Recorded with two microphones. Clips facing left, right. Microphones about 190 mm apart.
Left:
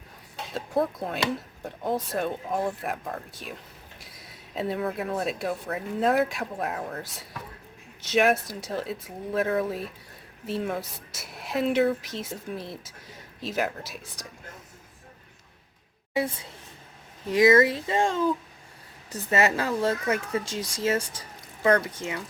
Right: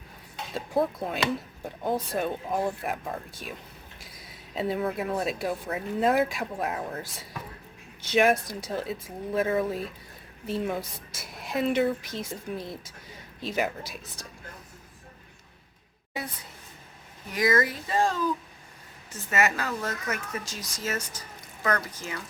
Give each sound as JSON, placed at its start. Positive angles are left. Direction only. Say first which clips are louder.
{"t": 0.5, "sound": "speech", "louder": "even", "side_deg": 0}
{"t": 16.1, "sound": "speech", "louder": "left 9 dB", "side_deg": 25}